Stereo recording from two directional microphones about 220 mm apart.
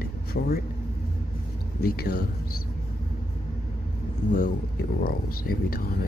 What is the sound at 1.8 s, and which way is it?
Speech, 45° left (ahead or behind).